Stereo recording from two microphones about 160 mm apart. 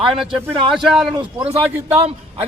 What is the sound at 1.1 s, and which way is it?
Speech, 30° right (ahead or behind).